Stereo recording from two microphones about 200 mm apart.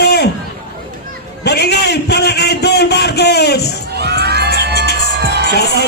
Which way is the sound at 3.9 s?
55° right (ahead or behind).